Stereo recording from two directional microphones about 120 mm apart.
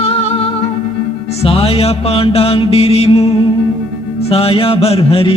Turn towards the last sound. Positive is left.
turn(degrees=50)  # may be behind; listen again after turning